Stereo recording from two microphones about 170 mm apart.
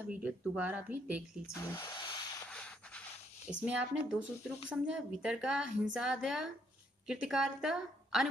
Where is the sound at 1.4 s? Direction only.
15° left (ahead or behind).